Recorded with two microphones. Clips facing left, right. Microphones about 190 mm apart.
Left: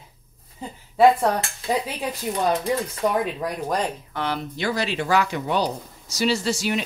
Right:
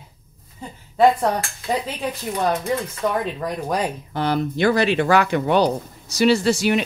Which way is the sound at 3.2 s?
10° left (ahead or behind).